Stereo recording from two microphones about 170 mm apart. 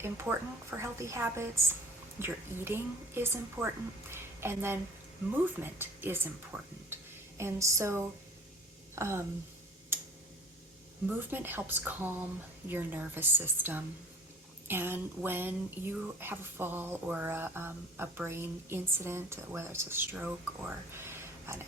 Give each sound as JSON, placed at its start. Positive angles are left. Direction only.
{"t": 0.0, "sound": "a woman's voice", "side_deg": -15}
{"t": 11.0, "sound": "speech", "side_deg": -10}